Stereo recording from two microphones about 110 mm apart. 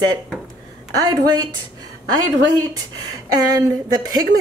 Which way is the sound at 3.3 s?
40° right (ahead or behind).